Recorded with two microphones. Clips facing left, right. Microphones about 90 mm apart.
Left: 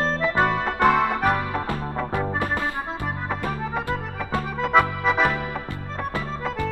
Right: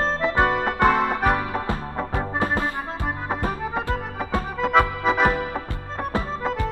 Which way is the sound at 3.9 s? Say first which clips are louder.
Right 1 dB; 30° right (ahead or behind).